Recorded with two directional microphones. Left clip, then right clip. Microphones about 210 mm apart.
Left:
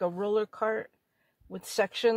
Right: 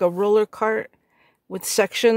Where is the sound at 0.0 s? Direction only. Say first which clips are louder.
Right 10 dB; 50° right (ahead or behind).